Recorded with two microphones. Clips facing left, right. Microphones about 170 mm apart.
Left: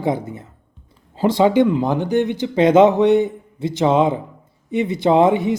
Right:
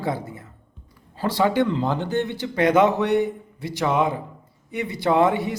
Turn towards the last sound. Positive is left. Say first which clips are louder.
# left 5 dB
turn(degrees=20)  # may be behind; listen again after turning